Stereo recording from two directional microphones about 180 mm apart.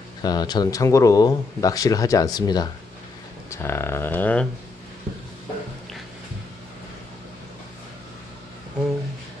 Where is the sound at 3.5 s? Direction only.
15° left (ahead or behind).